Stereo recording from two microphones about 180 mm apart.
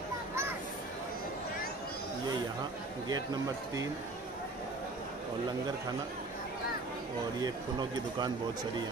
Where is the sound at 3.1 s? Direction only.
20° right (ahead or behind).